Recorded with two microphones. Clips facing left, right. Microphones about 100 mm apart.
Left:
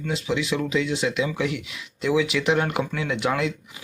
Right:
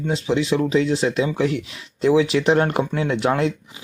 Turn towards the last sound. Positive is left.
turn(degrees=-35)  # may be behind; listen again after turning